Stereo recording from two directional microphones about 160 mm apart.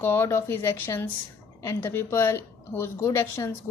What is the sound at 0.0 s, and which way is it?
A woman's voice, 15° left (ahead or behind).